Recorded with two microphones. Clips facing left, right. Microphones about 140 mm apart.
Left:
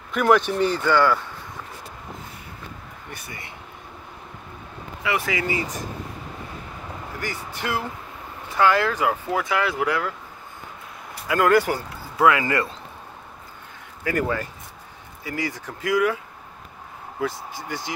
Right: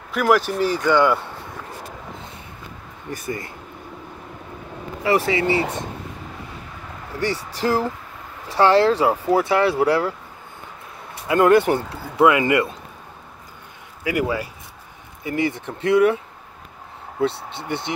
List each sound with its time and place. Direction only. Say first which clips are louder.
0.1 s speech: even; centre (ahead or behind); by 1.2 s 20° right (ahead or behind)
3.1 s speech: right 11 dB; 45° right (ahead or behind)
5.0 s speech: right 6 dB; 35° right (ahead or behind)
7.5 s speech: right 6 dB; 35° right (ahead or behind)
11.2 s speech: right 4 dB; 25° right (ahead or behind)
14.0 s speech: right 2 dB; 10° right (ahead or behind)
15.2 s speech: right 6 dB; 25° right (ahead or behind)
17.6 s speech: right 5 dB; 25° right (ahead or behind)